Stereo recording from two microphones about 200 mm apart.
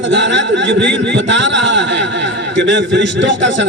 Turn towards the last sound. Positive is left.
turn(degrees=-65)  # may be behind; listen again after turning